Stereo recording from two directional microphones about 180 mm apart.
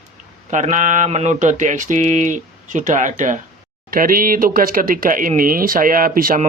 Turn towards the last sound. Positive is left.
turn(degrees=-50)  # may be behind; listen again after turning